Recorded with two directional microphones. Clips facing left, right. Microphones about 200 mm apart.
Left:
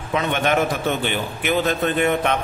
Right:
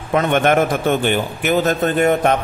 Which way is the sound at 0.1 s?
50° right (ahead or behind).